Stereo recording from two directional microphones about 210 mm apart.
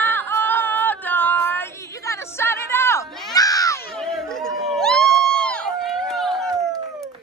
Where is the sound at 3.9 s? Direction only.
Centre (ahead or behind).